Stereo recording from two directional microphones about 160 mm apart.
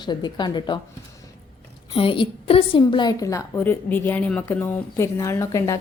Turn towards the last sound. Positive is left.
turn(degrees=20)  # may be behind; listen again after turning